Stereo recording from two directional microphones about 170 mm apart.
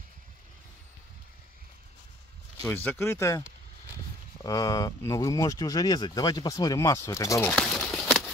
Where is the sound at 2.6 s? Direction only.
10° left (ahead or behind).